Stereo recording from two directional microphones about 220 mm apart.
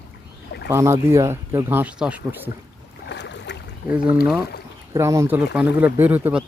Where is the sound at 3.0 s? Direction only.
50° left (ahead or behind).